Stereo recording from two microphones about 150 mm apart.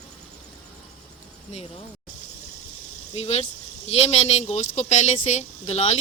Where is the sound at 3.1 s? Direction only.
45° left (ahead or behind).